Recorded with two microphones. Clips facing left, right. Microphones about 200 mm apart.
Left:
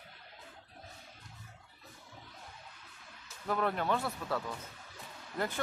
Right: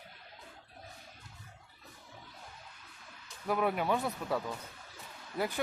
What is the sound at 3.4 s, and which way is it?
Speech, 10° right (ahead or behind).